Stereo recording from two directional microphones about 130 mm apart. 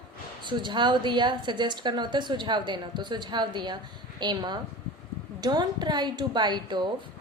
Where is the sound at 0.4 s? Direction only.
35° right (ahead or behind).